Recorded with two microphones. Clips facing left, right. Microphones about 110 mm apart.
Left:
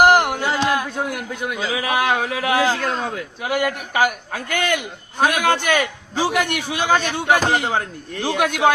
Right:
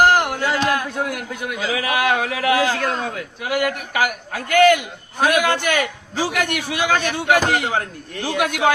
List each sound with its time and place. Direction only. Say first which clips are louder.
0.0 s a man's voice: left 2 dB; 20° left (ahead or behind)